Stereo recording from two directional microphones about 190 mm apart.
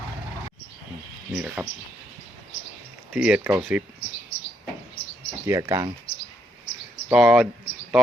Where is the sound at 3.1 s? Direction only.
5° right (ahead or behind).